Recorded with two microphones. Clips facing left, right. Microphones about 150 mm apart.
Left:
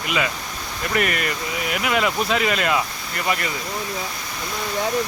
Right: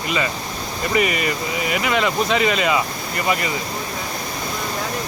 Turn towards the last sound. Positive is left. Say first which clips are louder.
# right 3 dB
turn(degrees=0)  # may be behind; listen again after turning